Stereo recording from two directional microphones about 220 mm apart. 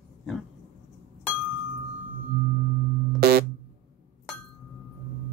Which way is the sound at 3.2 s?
45° right (ahead or behind).